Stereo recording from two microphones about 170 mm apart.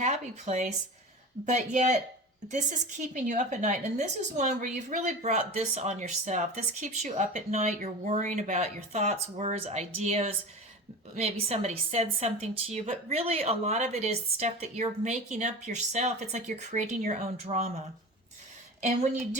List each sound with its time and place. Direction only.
0.0 s a woman's voice: 40° right (ahead or behind)
18.8 s a woman's voice: 45° right (ahead or behind)